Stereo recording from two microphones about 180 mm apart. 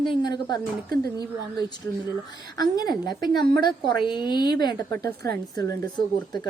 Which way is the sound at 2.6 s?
20° left (ahead or behind).